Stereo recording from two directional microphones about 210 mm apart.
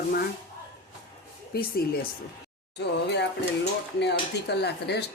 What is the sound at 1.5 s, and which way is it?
Speech, 45° left (ahead or behind).